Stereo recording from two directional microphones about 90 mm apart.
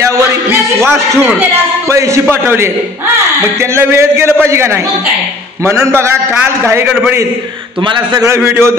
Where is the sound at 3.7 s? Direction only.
30° right (ahead or behind).